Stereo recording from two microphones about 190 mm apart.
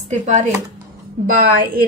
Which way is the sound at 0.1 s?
40° right (ahead or behind).